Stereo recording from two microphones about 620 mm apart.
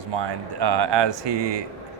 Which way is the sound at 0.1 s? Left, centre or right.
Right.